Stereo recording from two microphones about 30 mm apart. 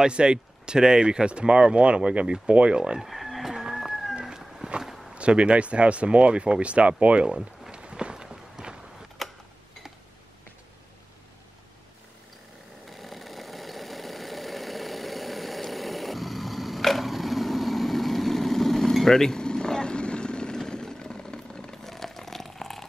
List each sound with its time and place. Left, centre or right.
0.0 s speech: right
3.0 s chicken: centre
3.4 s chicken: centre
4.1 s a sound: right
4.6 s walk: right
5.1 s speech: right
7.7 s run: right
8.6 s walk: centre
9.2 s a sound: centre
12.9 s engine: centre; by 20.5 s left
20.5 s vehicle: left
21.8 s a sound: centre